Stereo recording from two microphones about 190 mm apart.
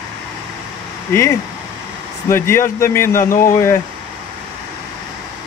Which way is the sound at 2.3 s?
15° left (ahead or behind).